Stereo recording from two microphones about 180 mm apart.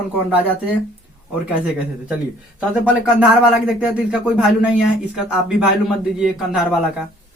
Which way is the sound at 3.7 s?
5° right (ahead or behind).